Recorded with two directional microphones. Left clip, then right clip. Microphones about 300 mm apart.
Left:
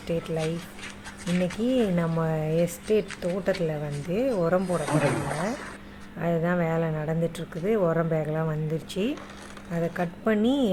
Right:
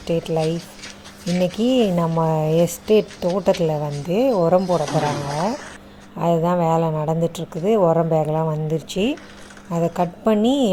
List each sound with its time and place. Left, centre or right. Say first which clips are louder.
0.1 s a woman's voice: right 8 dB; centre
4.4 s speech: right 8 dB; centre
5.3 s a woman's voice: right 7 dB; centre
7.8 s a woman's voice: right 9 dB; centre